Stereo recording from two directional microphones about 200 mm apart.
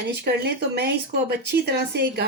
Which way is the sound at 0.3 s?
55° right (ahead or behind).